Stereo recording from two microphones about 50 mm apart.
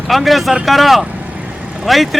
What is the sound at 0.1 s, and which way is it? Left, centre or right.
Speech, centre.